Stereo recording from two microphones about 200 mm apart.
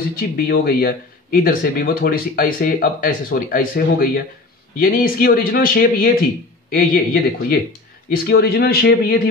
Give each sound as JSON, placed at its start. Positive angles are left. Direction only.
{"t": 0.5, "sound": "speech", "side_deg": 50}